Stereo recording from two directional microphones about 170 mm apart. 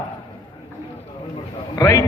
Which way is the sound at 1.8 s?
20° left (ahead or behind).